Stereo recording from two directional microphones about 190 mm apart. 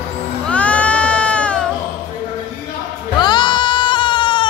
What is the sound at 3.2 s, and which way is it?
Sheep, 25° left (ahead or behind).